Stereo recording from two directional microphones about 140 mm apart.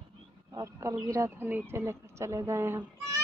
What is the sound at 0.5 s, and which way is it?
Speech, 20° right (ahead or behind).